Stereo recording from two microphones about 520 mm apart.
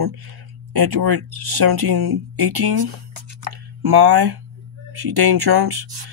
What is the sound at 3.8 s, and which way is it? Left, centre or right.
Speech, right.